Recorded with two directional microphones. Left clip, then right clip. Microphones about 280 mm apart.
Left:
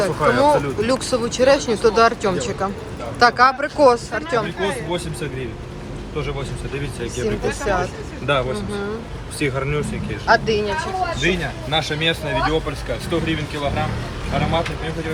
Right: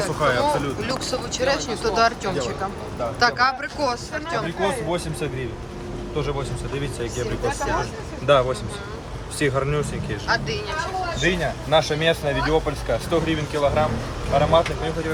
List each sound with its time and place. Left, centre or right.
0.0 s speech: centre
4.6 s speech: right
7.2 s speech: centre
9.4 s speech: centre
10.2 s speech: centre
11.3 s speech: right